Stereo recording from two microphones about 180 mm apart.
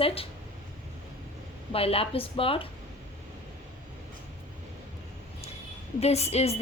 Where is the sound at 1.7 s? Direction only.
30° left (ahead or behind).